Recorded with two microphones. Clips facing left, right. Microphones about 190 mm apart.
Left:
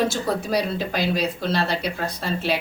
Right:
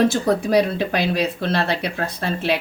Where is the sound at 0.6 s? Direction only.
60° right (ahead or behind).